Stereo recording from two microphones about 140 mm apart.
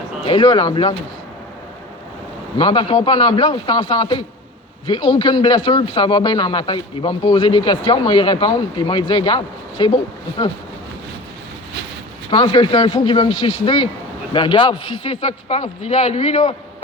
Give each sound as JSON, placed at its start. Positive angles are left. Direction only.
{"t": 0.3, "sound": "a man's voice", "side_deg": 35}
{"t": 2.6, "sound": "a man's voice", "side_deg": 35}
{"t": 12.3, "sound": "a man's voice", "side_deg": 35}